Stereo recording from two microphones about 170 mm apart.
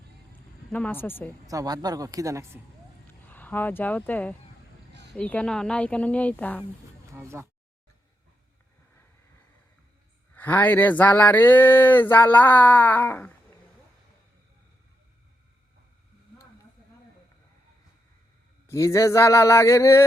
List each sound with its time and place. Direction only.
0.7 s speech: 10° left (ahead or behind)
1.5 s speech: 20° right (ahead or behind)
3.2 s speech: 10° left (ahead or behind)
4.9 s a sound: 85° right
5.1 s speech: 5° left (ahead or behind)
7.1 s a sound: 15° right (ahead or behind)
10.3 s speech: 10° left (ahead or behind)
18.7 s speech: 20° left (ahead or behind)